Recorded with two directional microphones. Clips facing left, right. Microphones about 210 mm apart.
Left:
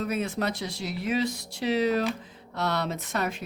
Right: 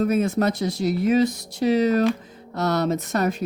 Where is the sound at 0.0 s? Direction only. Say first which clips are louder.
Right 8 dB; 45° right (ahead or behind).